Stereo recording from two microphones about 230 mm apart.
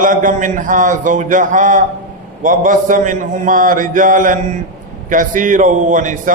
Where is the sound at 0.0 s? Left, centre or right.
Right.